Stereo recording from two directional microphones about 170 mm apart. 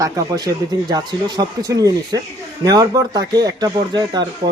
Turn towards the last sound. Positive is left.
turn(degrees=-25)  # may be behind; listen again after turning